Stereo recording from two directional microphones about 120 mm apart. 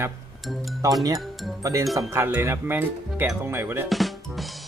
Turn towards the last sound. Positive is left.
turn(degrees=0)  # may be behind; listen again after turning